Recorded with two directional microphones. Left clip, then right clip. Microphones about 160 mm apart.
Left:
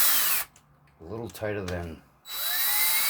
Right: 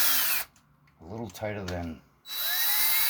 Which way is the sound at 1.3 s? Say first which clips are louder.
Left 3 dB; 25° left (ahead or behind).